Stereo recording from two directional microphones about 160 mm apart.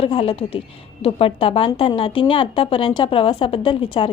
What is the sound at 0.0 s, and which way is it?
A woman's voice, 35° left (ahead or behind).